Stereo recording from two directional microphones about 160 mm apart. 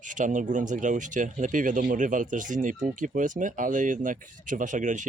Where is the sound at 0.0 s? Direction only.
55° right (ahead or behind).